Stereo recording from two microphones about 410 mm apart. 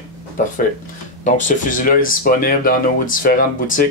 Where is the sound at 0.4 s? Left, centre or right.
Centre.